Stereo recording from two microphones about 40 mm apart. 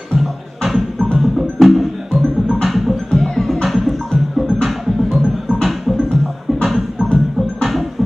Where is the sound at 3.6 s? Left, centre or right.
Centre.